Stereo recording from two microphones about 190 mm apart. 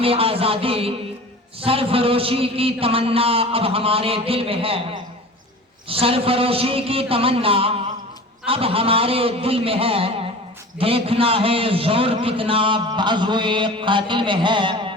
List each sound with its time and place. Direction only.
0.0 s a man's voice: 30° right (ahead or behind)